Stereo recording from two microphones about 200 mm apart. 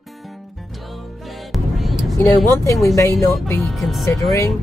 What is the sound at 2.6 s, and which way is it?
Speech, 15° left (ahead or behind).